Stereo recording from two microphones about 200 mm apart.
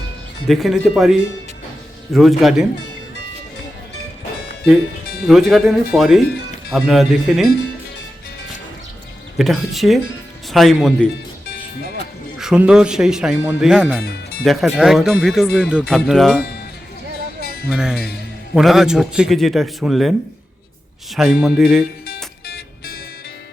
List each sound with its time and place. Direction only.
0.4 s speech: centre (ahead or behind)
5.3 s speech: centre (ahead or behind)
9.4 s speech: centre (ahead or behind)
12.4 s speech: 5° right (ahead or behind)
17.7 s speech: 5° right (ahead or behind)
21.2 s speech: centre (ahead or behind)
22.4 s music: 50° left (ahead or behind)